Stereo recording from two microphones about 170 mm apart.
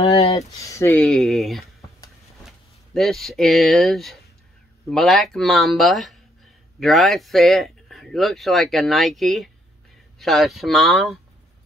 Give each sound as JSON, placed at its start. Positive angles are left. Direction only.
{"t": 0.0, "sound": "a sound", "side_deg": 40}
{"t": 0.6, "sound": "speech", "side_deg": 20}
{"t": 1.0, "sound": "speech", "side_deg": 0}